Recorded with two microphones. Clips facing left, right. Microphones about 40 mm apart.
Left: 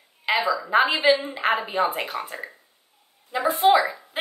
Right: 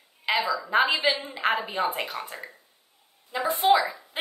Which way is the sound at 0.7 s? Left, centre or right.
Centre.